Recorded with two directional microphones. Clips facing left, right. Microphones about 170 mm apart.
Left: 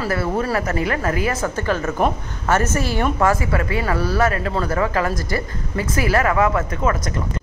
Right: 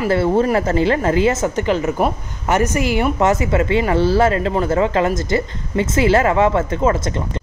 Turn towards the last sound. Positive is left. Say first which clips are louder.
# right 4 dB
turn(degrees=-25)  # may be behind; listen again after turning